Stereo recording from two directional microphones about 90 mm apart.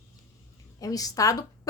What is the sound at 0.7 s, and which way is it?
Speech, 40° left (ahead or behind).